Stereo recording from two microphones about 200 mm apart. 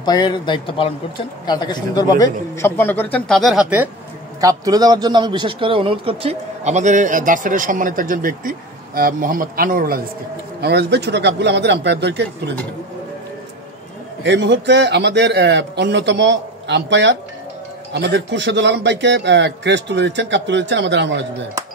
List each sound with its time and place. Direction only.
0.0 s a man's voice: 20° left (ahead or behind); by 3.9 s 5° right (ahead or behind)
4.4 s a man's voice: 20° right (ahead or behind); by 12.5 s 60° right (ahead or behind)
14.2 s a man's voice: 60° right (ahead or behind)